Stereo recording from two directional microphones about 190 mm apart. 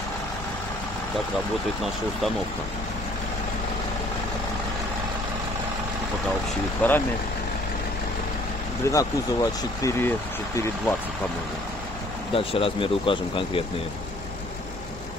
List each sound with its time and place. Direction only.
6.8 s speech: 10° left (ahead or behind)
8.8 s speech: 20° left (ahead or behind)
12.3 s speech: 30° left (ahead or behind)